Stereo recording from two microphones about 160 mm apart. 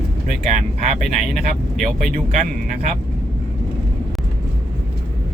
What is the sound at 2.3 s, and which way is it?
Speech, 50° right (ahead or behind).